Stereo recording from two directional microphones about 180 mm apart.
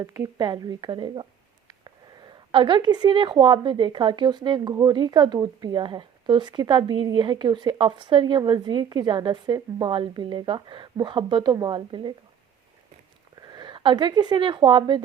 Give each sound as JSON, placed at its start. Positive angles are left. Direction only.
{"t": 0.0, "sound": "a woman's voice", "side_deg": -20}
{"t": 2.5, "sound": "a woman's voice", "side_deg": -30}
{"t": 13.4, "sound": "speech", "side_deg": -25}